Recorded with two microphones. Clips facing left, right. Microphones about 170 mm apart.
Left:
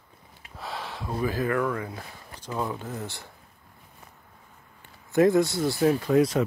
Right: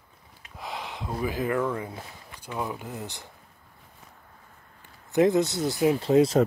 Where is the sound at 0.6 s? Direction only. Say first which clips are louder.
Even; 15° right (ahead or behind).